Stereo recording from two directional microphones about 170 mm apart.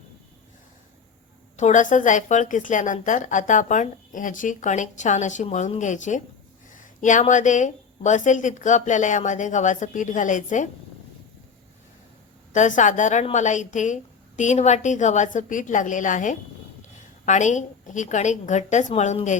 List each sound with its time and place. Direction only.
1.5 s a woman's voice: 45° left (ahead or behind)
12.5 s a woman's voice: 45° left (ahead or behind)